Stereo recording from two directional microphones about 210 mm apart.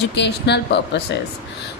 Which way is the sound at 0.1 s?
55° left (ahead or behind).